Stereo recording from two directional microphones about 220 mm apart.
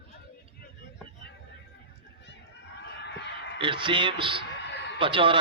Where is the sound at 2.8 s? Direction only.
50° left (ahead or behind).